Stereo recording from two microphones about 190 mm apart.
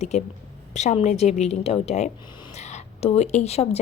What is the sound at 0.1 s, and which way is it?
A woman's voice, 35° left (ahead or behind).